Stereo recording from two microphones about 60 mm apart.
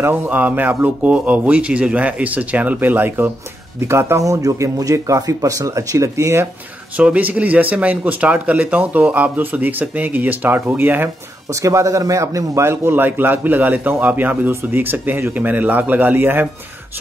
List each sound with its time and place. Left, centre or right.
0.1 s speech: right
3.8 s speech: right
4.2 s speech: right
7.0 s speech: right
11.5 s a man's voice: right
12.6 s a man's voice: right